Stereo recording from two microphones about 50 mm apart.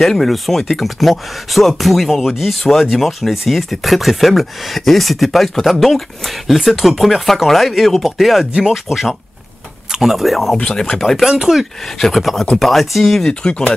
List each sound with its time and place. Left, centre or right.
0.0 s speech: centre
10.0 s speech: centre
11.2 s speech: centre
12.0 s speech: centre
13.2 s speech: centre